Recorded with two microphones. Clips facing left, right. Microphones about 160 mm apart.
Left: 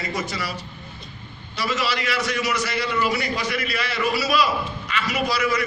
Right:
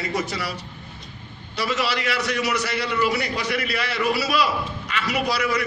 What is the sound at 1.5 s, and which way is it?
A man's voice, 60° right (ahead or behind).